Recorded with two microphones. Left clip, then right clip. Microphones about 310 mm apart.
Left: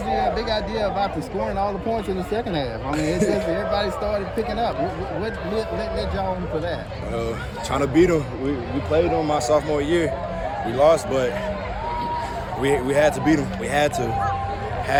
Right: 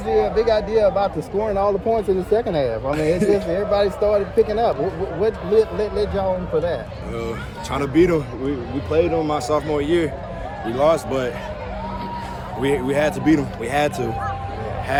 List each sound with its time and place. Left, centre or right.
0.1 s speech: right
2.9 s a woman's voice: centre
3.5 s speech: right
7.7 s a man's voice: centre
12.6 s a man's voice: centre